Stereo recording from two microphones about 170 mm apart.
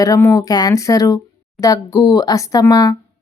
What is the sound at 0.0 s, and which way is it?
A woman's voice, 20° left (ahead or behind).